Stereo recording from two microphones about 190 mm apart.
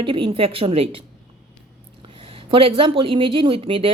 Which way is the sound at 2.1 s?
30° right (ahead or behind).